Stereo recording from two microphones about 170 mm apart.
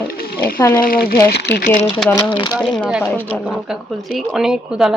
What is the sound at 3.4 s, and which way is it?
Speech, 5° right (ahead or behind).